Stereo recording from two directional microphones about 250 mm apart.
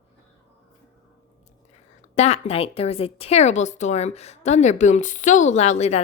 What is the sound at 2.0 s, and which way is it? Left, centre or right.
A woman's voice, left.